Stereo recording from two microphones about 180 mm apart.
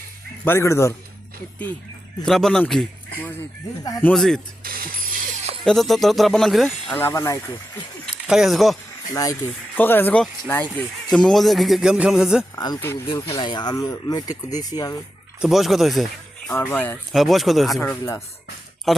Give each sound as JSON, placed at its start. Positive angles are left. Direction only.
{"t": 0.4, "sound": "speech", "side_deg": 15}
{"t": 2.2, "sound": "speech", "side_deg": 0}
{"t": 4.0, "sound": "speech", "side_deg": 0}
{"t": 4.6, "sound": "mechanisms", "side_deg": -55}
{"t": 5.6, "sound": "speech", "side_deg": 0}
{"t": 7.0, "sound": "speech", "side_deg": 15}
{"t": 8.3, "sound": "speech", "side_deg": 0}
{"t": 9.7, "sound": "speech", "side_deg": 10}
{"t": 12.5, "sound": "speech", "side_deg": 20}
{"t": 15.4, "sound": "speech", "side_deg": 0}
{"t": 17.7, "sound": "speech", "side_deg": 15}
{"t": 18.9, "sound": "speech", "side_deg": 0}